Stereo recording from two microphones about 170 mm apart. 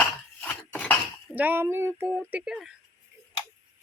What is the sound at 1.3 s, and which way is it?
Speech, 10° right (ahead or behind).